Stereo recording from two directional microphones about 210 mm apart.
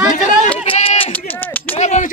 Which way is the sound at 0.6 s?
25° left (ahead or behind).